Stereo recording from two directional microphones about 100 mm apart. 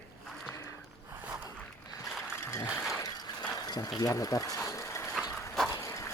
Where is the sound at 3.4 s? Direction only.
40° left (ahead or behind).